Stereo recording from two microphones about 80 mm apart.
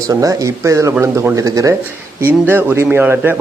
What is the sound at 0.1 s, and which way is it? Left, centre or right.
Speech, right.